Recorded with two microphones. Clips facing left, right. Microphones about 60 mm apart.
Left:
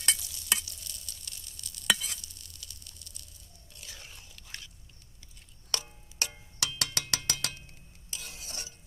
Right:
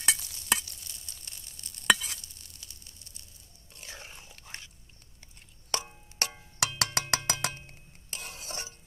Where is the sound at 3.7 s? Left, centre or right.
Right.